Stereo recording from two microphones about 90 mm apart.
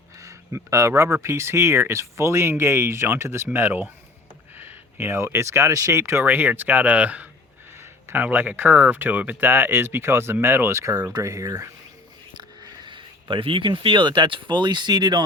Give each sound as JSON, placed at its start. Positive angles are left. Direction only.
{"t": 0.2, "sound": "speech", "side_deg": -35}
{"t": 12.4, "sound": "speech", "side_deg": -55}